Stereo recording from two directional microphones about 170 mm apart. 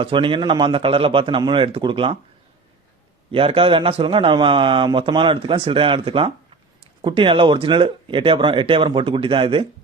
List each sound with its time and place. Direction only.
0.0 s a man's voice: 30° right (ahead or behind)
3.3 s a man's voice: 30° right (ahead or behind)